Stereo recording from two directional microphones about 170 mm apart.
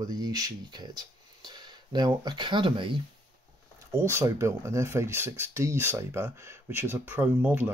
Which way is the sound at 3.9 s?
15° right (ahead or behind).